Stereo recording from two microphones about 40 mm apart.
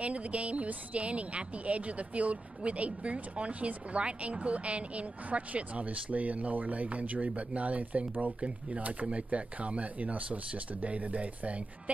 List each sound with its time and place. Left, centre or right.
0.0 s speech: right